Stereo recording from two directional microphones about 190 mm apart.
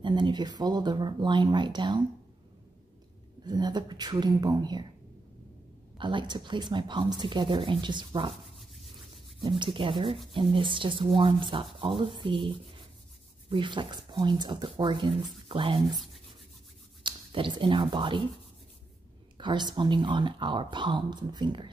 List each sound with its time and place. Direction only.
0.0 s speech: 25° right (ahead or behind)
3.4 s speech: 20° right (ahead or behind)
5.9 s speech: 25° right (ahead or behind)
9.4 s speech: 25° right (ahead or behind)
17.0 s speech: 25° right (ahead or behind)
19.3 s speech: 25° right (ahead or behind)